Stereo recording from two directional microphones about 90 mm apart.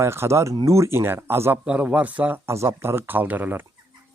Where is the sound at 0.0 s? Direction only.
30° right (ahead or behind).